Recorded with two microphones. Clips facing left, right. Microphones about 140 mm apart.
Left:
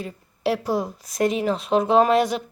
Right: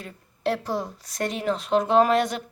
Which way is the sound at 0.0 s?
5° left (ahead or behind).